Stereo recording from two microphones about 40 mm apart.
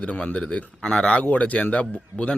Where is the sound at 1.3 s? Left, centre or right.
Left.